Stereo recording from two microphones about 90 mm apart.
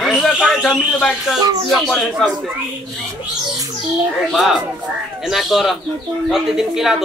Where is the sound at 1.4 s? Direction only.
45° right (ahead or behind).